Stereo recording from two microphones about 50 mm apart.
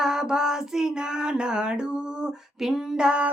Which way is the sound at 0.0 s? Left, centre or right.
Centre.